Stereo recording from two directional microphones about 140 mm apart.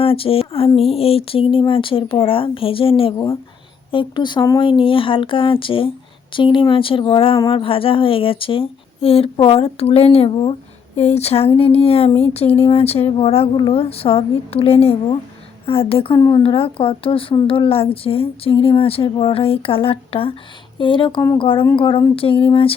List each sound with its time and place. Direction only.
0.0 s speech: 40° left (ahead or behind)
16.1 s speech: 25° left (ahead or behind)
16.4 s speech: 40° left (ahead or behind)